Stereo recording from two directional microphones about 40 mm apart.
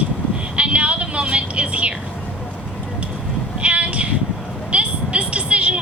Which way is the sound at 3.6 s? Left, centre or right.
Right.